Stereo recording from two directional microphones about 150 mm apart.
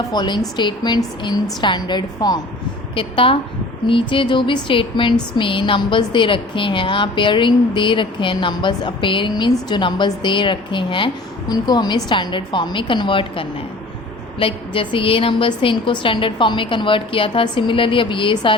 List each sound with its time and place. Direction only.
0.1 s a woman's voice: 30° left (ahead or behind)